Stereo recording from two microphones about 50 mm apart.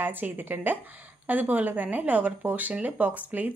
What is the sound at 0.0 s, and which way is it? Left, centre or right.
A woman's voice, right.